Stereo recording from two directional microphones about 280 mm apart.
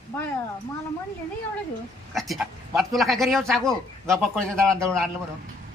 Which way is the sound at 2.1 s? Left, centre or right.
Centre.